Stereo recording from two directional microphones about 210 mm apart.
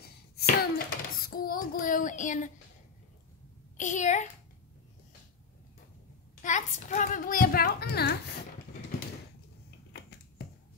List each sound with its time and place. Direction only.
0.0 s a sound: 45° left (ahead or behind)
3.7 s a child's voice: 35° left (ahead or behind)
6.4 s a child's voice: 35° left (ahead or behind)